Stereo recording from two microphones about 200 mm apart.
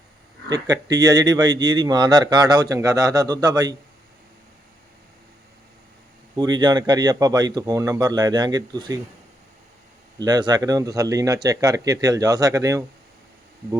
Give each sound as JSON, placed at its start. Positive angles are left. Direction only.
{"t": 0.4, "sound": "speech", "side_deg": -20}
{"t": 6.3, "sound": "speech", "side_deg": -20}
{"t": 10.2, "sound": "speech", "side_deg": -20}